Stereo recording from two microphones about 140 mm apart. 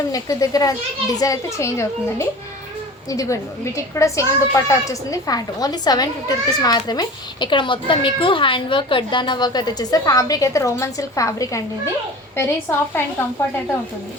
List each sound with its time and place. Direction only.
0.1 s a child's voice: 25° left (ahead or behind)